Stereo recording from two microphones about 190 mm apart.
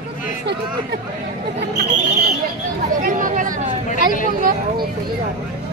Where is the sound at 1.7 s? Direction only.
40° right (ahead or behind).